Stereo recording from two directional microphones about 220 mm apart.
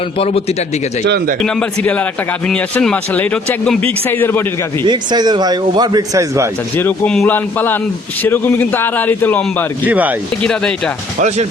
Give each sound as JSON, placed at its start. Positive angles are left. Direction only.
{"t": 0.2, "sound": "a man's voice", "side_deg": 25}
{"t": 1.0, "sound": "speech", "side_deg": -50}
{"t": 1.4, "sound": "a man's voice", "side_deg": 5}
{"t": 4.8, "sound": "a man's voice", "side_deg": -20}
{"t": 6.7, "sound": "a man's voice", "side_deg": 5}
{"t": 9.8, "sound": "a man's voice", "side_deg": -5}
{"t": 10.4, "sound": "speech", "side_deg": 5}